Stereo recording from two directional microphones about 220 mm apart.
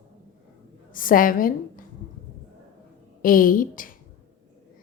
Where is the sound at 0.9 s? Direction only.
40° left (ahead or behind).